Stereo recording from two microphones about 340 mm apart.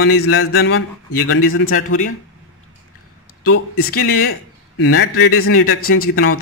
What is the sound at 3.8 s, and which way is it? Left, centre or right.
A man's voice, left.